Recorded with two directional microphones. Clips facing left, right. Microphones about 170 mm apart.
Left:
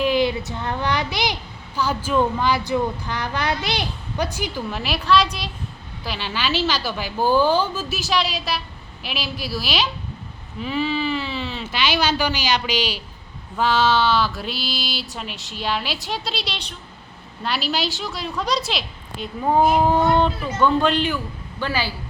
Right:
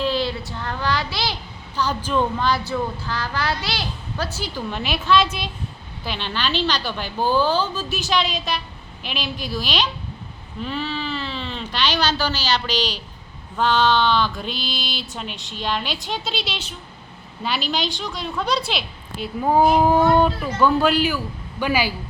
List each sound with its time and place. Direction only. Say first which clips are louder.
0.0 s a child's voice: left 3 dB; 15° left (ahead or behind)
4.8 s a woman's voice: even; centre (ahead or behind)